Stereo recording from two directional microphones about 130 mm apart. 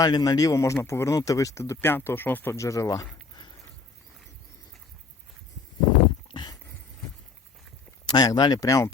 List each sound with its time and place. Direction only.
0.0 s speech: 30° left (ahead or behind)
6.3 s heart sounds: 35° left (ahead or behind)
8.0 s speech: 30° left (ahead or behind)